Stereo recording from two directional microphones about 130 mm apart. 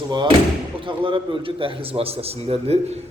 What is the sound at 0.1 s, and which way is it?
A man's voice, 35° right (ahead or behind).